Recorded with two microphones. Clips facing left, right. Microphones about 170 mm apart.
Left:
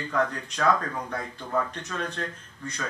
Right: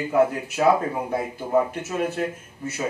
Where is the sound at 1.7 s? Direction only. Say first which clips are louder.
Right 7 dB; 10° right (ahead or behind).